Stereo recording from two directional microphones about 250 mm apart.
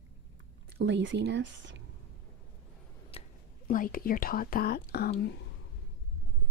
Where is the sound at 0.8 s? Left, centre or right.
Right.